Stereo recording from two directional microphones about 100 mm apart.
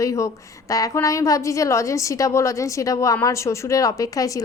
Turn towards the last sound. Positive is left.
turn(degrees=35)  # may be behind; listen again after turning